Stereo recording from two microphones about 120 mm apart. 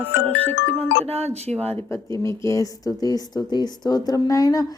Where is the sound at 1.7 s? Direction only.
25° left (ahead or behind).